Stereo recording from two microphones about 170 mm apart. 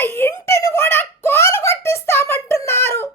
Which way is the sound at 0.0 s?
15° left (ahead or behind).